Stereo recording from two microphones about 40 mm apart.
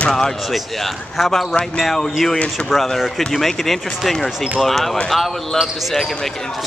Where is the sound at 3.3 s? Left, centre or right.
Centre.